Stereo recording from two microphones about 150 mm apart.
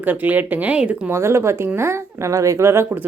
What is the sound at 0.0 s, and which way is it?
Speech, 10° right (ahead or behind).